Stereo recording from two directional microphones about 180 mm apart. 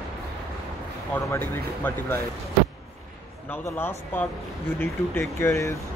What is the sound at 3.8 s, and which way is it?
Speech, 10° left (ahead or behind).